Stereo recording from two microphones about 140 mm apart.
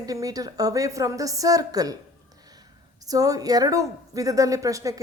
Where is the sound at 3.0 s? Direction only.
25° right (ahead or behind).